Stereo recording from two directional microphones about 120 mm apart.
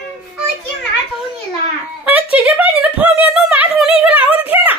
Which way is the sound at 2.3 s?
15° right (ahead or behind).